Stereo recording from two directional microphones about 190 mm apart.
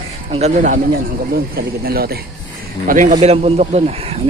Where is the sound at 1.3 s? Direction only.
55° right (ahead or behind).